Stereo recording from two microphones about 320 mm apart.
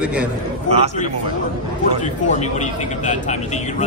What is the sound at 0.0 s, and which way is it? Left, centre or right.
Speech, centre.